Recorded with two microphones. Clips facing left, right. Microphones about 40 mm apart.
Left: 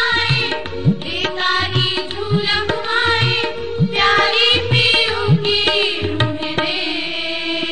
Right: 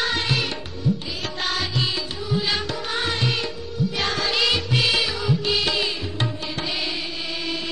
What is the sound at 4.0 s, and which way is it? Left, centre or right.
Music, left.